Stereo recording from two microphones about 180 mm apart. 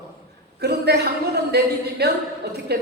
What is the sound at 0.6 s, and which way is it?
A woman's voice, 65° right (ahead or behind).